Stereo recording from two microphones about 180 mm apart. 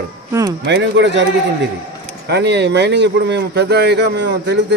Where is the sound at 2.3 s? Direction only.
70° right (ahead or behind).